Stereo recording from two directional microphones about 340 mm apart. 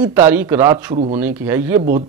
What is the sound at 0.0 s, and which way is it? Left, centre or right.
A man's voice, centre.